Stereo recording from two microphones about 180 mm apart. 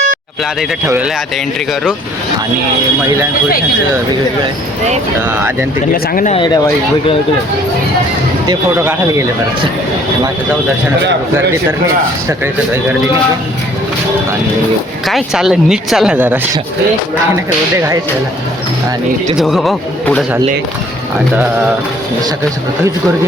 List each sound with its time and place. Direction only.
5.9 s speech: 50° left (ahead or behind)
6.3 s speech: 25° left (ahead or behind)
8.7 s speech: 10° right (ahead or behind)
15.0 s speech: centre (ahead or behind)
19.4 s speech: centre (ahead or behind)